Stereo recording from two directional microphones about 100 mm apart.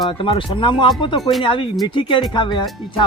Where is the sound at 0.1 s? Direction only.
60° left (ahead or behind).